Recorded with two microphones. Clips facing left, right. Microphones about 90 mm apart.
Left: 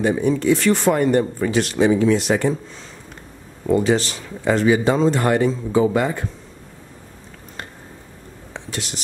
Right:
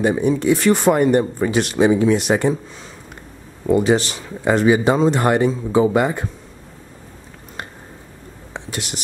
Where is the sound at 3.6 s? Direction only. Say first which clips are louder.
Right 2 dB; 15° right (ahead or behind).